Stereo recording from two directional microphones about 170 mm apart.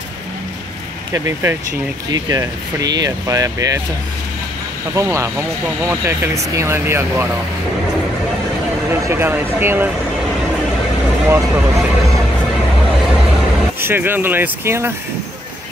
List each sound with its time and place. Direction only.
1.1 s speech: 15° right (ahead or behind)
4.9 s speech: 15° right (ahead or behind)
9.0 s speech: 15° right (ahead or behind)
11.2 s speech: 10° right (ahead or behind)
13.7 s speech: 15° right (ahead or behind)